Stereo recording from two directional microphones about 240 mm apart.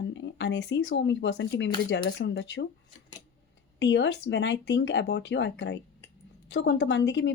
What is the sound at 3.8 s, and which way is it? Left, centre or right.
Speech, left.